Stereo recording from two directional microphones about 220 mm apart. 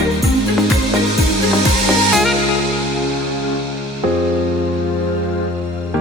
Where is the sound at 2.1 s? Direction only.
Centre (ahead or behind).